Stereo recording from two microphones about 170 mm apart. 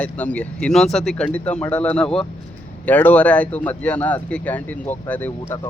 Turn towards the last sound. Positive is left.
turn(degrees=10)  # may be behind; listen again after turning